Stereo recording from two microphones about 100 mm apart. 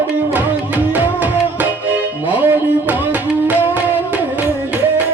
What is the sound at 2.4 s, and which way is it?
Music, 15° right (ahead or behind).